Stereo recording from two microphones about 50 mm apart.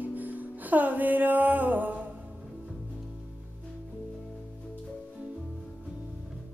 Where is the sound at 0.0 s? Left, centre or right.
Right.